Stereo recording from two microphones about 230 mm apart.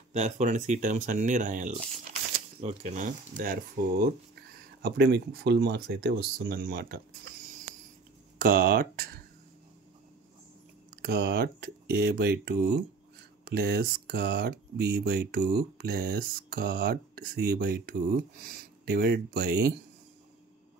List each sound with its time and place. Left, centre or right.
0.1 s speech: right
8.4 s speech: right
11.0 s speech: right